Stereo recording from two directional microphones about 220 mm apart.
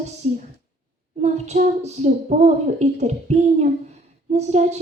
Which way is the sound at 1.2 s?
30° right (ahead or behind).